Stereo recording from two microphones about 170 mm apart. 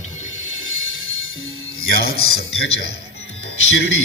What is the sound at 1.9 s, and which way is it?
Speech, 65° left (ahead or behind).